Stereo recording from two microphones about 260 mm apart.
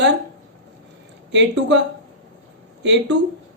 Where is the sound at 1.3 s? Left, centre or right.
Right.